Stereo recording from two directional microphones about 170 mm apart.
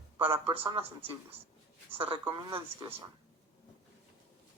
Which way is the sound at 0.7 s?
35° right (ahead or behind).